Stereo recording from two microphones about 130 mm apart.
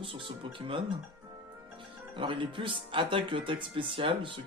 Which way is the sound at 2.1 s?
40° right (ahead or behind).